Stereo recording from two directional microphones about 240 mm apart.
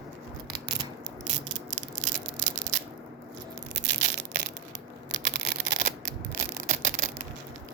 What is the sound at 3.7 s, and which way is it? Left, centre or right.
Crushing, right.